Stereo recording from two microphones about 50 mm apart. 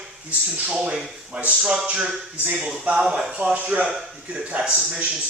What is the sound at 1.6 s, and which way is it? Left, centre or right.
Speech, centre.